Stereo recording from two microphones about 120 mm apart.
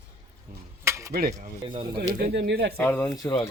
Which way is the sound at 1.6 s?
45° right (ahead or behind).